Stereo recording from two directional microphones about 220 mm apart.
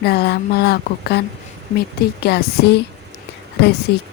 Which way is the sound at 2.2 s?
45° left (ahead or behind).